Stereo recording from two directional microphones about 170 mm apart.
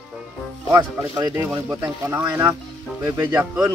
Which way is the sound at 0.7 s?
20° right (ahead or behind).